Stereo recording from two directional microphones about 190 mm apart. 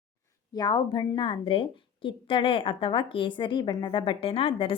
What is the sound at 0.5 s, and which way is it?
A woman's voice, 20° left (ahead or behind).